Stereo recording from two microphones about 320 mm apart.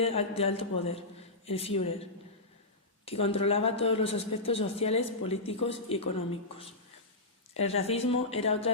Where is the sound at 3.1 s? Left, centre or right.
Centre.